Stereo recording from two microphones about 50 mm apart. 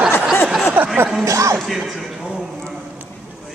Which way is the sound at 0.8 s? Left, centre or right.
Right.